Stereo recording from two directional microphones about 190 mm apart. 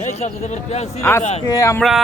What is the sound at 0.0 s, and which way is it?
A man's voice, 35° left (ahead or behind).